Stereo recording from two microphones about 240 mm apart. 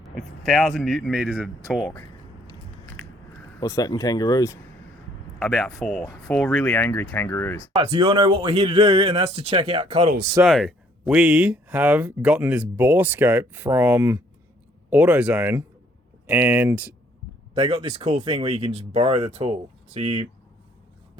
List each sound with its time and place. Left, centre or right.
0.2 s speech: centre
2.5 s biting: centre
3.6 s speech: centre
5.4 s speech: centre
7.8 s speech: right
10.4 s speech: centre
17.5 s speech: right